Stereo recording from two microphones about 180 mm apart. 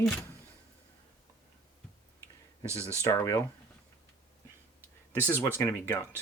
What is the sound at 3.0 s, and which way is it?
Speech, 15° left (ahead or behind).